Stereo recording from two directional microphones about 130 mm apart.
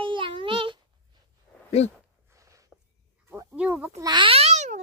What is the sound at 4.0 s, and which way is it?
Babbling, 35° right (ahead or behind).